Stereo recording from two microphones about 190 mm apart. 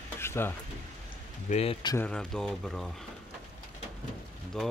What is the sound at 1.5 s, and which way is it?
Speech, 30° left (ahead or behind).